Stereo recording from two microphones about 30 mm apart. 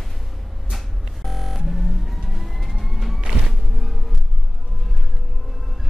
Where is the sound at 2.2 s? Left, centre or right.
Centre.